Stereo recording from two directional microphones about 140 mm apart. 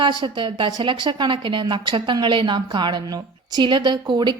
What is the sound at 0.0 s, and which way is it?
Speech, 30° right (ahead or behind).